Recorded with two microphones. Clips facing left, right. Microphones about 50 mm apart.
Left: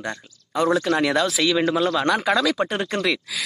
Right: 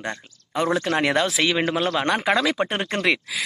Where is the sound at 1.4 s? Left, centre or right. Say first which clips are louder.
Left 1 dB; right.